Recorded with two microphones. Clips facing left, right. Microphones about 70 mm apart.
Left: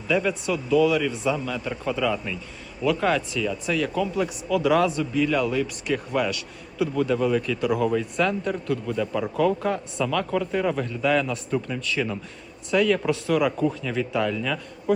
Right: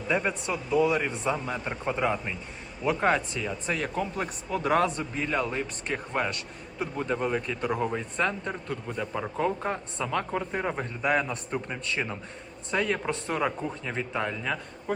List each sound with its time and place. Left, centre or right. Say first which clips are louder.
0.1 s speech: left 4 dB; right